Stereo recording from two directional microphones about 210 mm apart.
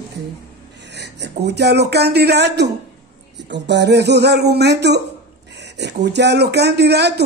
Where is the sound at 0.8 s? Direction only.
55° right (ahead or behind).